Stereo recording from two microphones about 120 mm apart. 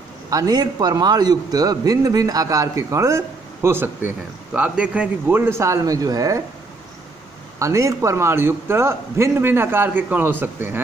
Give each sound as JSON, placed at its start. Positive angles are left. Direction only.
{"t": 0.3, "sound": "a man's voice", "side_deg": -30}
{"t": 7.5, "sound": "a man's voice", "side_deg": -25}